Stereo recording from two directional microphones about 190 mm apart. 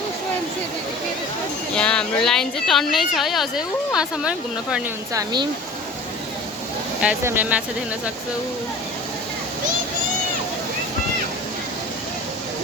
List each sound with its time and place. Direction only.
1.7 s speech: 5° left (ahead or behind)
5.1 s speech: 20° right (ahead or behind)
7.0 s speech: 10° right (ahead or behind)